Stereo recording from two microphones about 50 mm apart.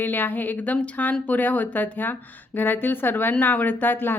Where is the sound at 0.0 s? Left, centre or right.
Left.